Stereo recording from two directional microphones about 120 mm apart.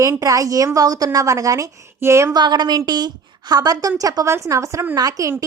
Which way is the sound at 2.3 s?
35° right (ahead or behind).